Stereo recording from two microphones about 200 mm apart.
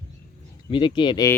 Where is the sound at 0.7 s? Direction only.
25° left (ahead or behind).